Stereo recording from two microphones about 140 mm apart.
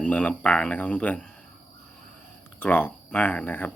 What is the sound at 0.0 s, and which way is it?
Speech, 10° left (ahead or behind).